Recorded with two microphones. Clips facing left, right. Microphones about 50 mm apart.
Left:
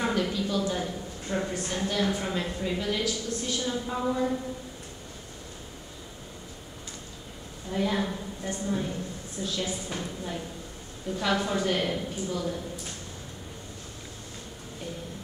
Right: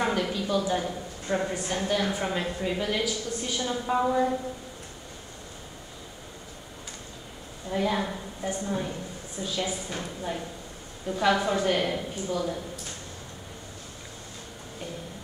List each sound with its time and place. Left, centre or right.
0.0 s a woman's voice: centre
3.8 s a woman's voice: right
4.1 s a woman's voice: centre
7.7 s a woman's voice: centre